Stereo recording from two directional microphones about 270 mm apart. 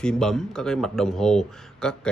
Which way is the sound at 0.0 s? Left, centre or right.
Centre.